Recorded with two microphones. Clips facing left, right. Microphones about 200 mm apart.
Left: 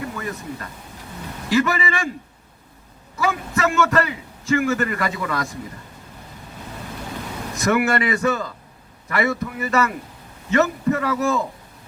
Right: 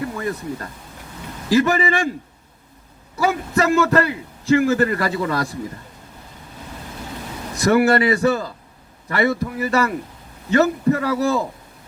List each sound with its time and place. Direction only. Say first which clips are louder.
0.2 s a man's voice: right 4 dB; 35° right (ahead or behind)
3.2 s a man's voice: right 3 dB; 35° right (ahead or behind)
7.6 s a man's voice: right 4 dB; 30° right (ahead or behind)